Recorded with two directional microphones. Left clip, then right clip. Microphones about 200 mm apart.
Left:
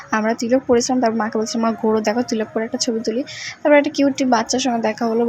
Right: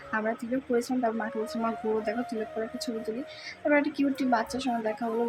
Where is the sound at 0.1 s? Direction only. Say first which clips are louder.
Left 12 dB; 35° left (ahead or behind).